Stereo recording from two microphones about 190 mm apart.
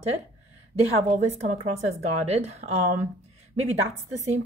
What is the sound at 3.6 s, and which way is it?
Speech, 35° right (ahead or behind).